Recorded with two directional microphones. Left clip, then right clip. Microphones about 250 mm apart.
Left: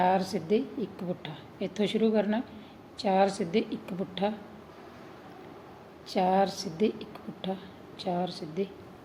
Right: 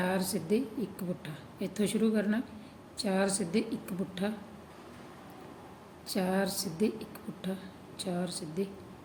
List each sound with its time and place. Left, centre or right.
0.0 s a woman's voice: right
6.1 s a woman's voice: right